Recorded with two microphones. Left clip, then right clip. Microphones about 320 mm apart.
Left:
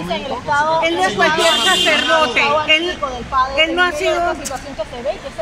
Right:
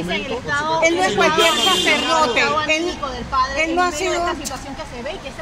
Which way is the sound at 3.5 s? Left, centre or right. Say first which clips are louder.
Left 4 dB; centre.